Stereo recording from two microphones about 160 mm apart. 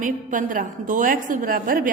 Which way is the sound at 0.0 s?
55° right (ahead or behind).